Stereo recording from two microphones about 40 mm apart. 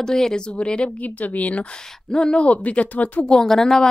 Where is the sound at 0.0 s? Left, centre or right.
Centre.